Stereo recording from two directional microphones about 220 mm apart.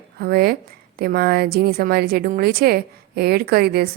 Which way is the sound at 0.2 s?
45° right (ahead or behind).